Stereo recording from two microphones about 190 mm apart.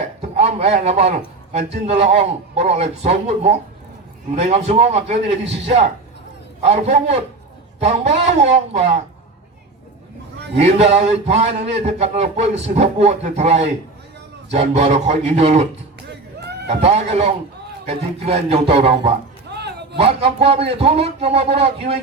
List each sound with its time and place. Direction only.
0.0 s a sound: 35° right (ahead or behind)
2.0 s speech: 35° right (ahead or behind)
6.6 s speech: 35° right (ahead or behind)
10.6 s speech: 35° right (ahead or behind)
16.8 s speech: 35° right (ahead or behind)
19.5 s a sound: 60° right (ahead or behind)
20.4 s speech: 30° right (ahead or behind)